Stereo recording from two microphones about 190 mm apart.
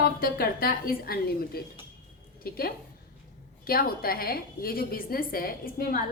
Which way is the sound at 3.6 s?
50° left (ahead or behind).